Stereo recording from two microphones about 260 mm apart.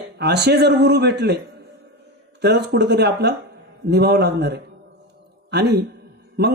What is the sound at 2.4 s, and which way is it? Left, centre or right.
A man's voice, right.